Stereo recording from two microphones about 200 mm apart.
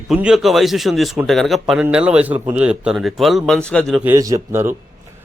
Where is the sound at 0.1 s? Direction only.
5° right (ahead or behind).